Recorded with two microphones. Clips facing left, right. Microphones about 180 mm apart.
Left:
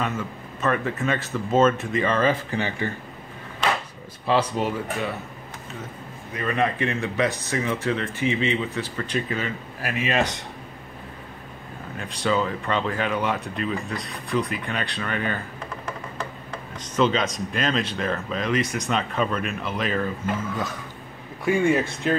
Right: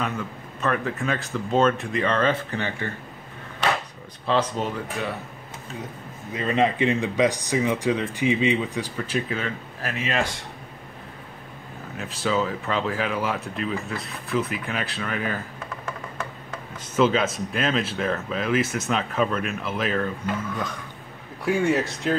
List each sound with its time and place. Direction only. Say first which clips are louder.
0.0 s speech: left 1 dB; centre (ahead or behind)
4.3 s speech: left 1 dB; 10° left (ahead or behind)
6.3 s speech: right 2 dB; 20° right (ahead or behind); by 9.5 s 5° right (ahead or behind)
9.8 s speech: left 3 dB; 15° left (ahead or behind)
12.0 s speech: left 1 dB; 5° right (ahead or behind)
16.7 s speech: right 1 dB; 10° right (ahead or behind)
21.5 s speech: left 1 dB; centre (ahead or behind)